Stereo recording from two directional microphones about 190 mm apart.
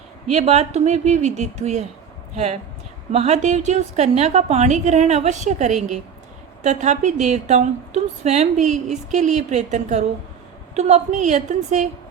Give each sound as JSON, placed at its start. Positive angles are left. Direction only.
{"t": 0.3, "sound": "a woman's voice", "side_deg": -35}